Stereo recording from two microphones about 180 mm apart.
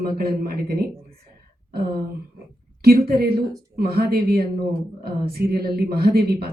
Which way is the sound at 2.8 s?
60° right (ahead or behind).